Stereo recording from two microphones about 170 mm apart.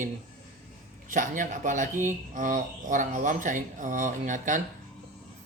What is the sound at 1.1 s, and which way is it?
Speech, 50° right (ahead or behind).